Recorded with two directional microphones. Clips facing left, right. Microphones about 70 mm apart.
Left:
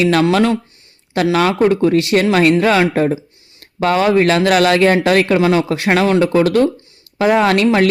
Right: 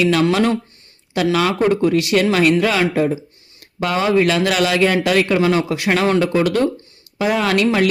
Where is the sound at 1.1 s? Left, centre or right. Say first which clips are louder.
Left 3 dB; left.